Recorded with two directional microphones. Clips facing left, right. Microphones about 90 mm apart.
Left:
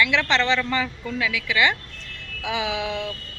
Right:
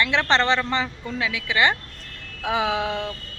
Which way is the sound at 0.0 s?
35° right (ahead or behind).